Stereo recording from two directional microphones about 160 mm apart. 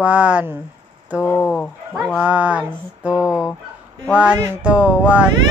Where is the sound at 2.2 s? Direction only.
10° right (ahead or behind).